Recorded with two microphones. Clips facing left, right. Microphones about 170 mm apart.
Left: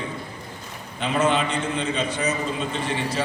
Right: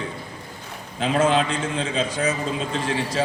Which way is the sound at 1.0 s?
90° right.